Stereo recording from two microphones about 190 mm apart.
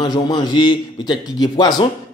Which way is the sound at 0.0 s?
20° left (ahead or behind).